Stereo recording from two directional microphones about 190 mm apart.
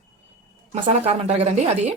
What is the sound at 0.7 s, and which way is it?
Speech, 35° right (ahead or behind).